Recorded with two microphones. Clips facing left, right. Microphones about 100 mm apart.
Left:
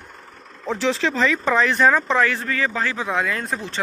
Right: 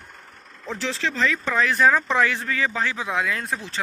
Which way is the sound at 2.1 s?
15° right (ahead or behind).